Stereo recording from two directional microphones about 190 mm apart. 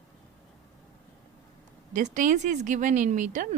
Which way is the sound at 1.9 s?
40° right (ahead or behind).